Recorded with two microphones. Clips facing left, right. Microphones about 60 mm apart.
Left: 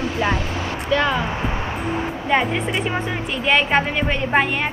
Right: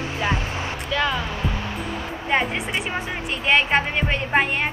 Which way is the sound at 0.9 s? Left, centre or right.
Centre.